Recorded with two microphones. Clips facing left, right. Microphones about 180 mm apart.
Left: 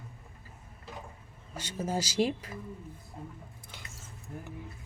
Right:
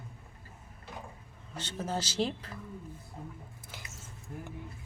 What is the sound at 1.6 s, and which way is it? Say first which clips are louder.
Speech: left 2 dB; 10° left (ahead or behind).